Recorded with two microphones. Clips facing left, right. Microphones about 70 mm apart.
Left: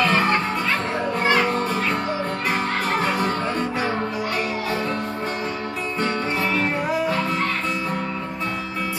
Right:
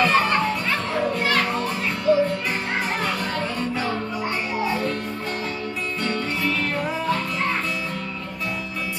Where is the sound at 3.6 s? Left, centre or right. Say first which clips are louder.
Left 1 dB; centre.